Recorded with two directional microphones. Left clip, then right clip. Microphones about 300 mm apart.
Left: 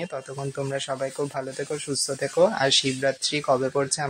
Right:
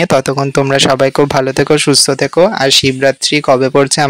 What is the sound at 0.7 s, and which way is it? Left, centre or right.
Speech, right.